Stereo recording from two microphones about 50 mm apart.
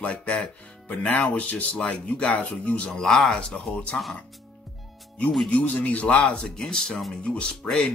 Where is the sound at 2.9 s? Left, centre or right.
Centre.